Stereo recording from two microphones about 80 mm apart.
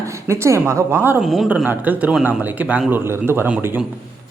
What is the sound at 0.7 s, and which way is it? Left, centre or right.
Speech, right.